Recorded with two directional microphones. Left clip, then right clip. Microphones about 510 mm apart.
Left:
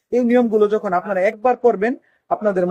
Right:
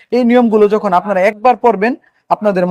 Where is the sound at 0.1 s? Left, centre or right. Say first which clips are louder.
Right 5 dB; right.